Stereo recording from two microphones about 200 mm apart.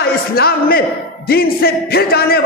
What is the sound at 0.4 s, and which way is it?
A man's voice, 50° left (ahead or behind).